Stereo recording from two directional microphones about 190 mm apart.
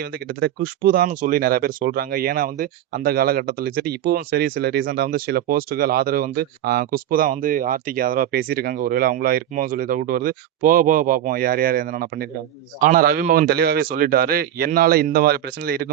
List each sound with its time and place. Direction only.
0.0 s speech: 55° right (ahead or behind)